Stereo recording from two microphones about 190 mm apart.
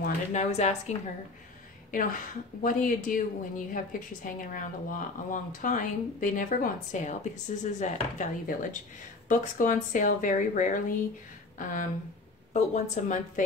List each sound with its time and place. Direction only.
0.0 s a woman's voice: 40° left (ahead or behind)